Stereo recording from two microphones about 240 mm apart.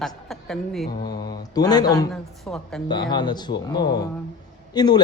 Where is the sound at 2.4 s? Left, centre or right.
Centre.